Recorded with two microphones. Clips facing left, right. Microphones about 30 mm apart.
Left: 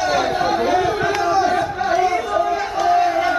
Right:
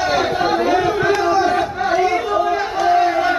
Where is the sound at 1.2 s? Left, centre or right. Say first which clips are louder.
Right 1 dB; centre.